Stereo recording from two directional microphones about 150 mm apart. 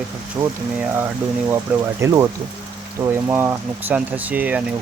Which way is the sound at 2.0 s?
20° right (ahead or behind).